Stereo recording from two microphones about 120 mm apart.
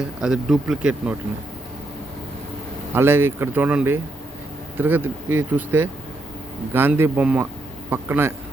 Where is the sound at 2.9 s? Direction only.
20° right (ahead or behind).